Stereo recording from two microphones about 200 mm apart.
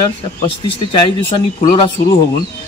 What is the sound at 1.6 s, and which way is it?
Speech, 25° left (ahead or behind).